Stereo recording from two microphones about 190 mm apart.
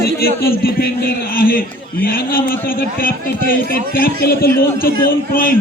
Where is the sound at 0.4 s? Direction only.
50° left (ahead or behind).